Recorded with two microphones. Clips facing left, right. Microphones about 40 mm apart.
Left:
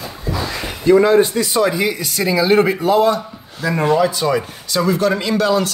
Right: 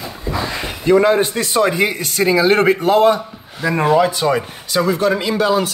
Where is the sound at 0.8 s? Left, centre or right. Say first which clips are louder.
Left 1 dB; right.